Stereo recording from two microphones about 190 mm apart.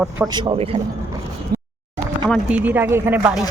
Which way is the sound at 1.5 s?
55° right (ahead or behind).